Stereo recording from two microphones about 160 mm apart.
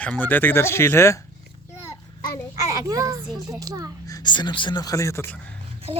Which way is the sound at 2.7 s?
20° right (ahead or behind).